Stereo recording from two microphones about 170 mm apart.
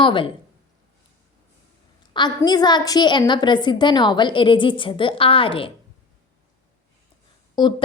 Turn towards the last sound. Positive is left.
turn(degrees=25)  # may be behind; listen again after turning